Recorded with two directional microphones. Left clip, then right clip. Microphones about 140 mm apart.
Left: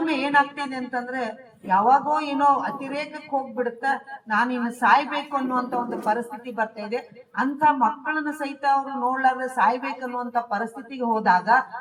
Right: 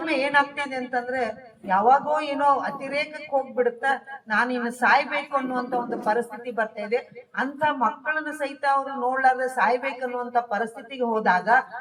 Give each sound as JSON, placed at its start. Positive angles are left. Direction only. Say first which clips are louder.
{"t": 0.1, "sound": "a woman's voice", "louder": "right 1 dB", "side_deg": -35}